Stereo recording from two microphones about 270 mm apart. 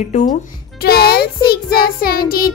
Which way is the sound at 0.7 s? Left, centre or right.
Left.